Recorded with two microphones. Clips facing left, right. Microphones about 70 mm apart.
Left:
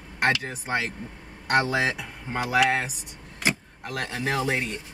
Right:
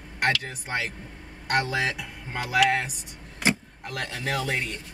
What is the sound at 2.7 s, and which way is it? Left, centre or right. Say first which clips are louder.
Speech: even; centre.